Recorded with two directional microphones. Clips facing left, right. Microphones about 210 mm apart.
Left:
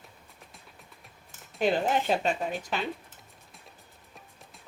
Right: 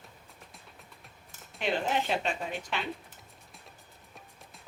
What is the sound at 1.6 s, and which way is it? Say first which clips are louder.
A woman's voice: left 4 dB; 40° left (ahead or behind).